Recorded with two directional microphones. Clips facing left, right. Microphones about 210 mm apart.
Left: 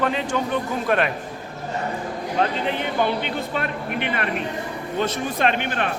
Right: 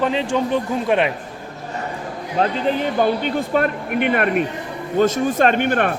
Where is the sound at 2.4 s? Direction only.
40° right (ahead or behind).